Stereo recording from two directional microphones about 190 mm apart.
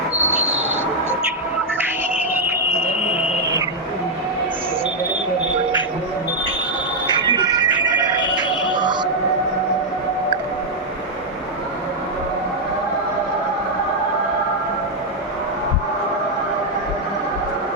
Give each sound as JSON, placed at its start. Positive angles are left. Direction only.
{"t": 0.3, "sound": "a sound", "side_deg": -5}
{"t": 2.3, "sound": "cricket", "side_deg": -10}
{"t": 3.1, "sound": "a sound", "side_deg": -5}
{"t": 7.2, "sound": "music", "side_deg": -25}
{"t": 7.9, "sound": "music", "side_deg": 25}
{"t": 8.4, "sound": "music", "side_deg": -25}